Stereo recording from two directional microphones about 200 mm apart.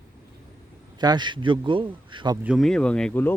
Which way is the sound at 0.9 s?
20° right (ahead or behind).